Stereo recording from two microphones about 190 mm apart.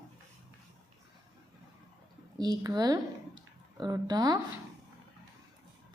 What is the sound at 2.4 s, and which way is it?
A woman's voice, 20° right (ahead or behind).